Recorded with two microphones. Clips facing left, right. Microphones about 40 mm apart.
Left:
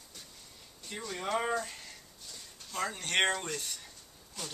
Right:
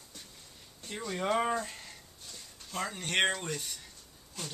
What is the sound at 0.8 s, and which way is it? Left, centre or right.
Speech, centre.